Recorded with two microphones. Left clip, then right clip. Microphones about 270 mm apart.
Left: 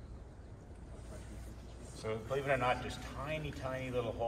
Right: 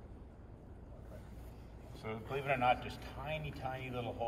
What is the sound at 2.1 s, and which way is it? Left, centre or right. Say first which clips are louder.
Speech: left 3 dB; centre.